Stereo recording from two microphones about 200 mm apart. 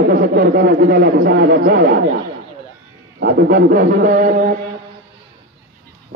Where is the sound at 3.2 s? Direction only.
45° right (ahead or behind).